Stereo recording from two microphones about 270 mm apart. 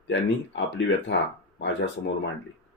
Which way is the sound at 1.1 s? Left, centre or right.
Left.